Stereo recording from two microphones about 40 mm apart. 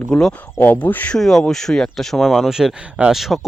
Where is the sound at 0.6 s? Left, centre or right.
Left.